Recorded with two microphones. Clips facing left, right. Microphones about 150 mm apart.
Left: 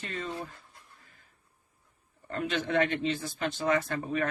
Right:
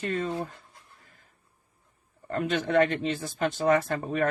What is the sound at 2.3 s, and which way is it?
Speech, 45° right (ahead or behind).